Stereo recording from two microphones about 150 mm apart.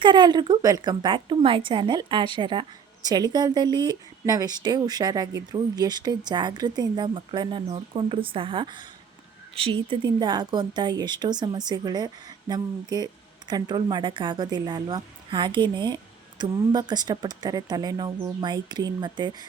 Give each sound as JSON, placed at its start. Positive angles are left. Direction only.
{"t": 0.0, "sound": "a woman's voice", "side_deg": -30}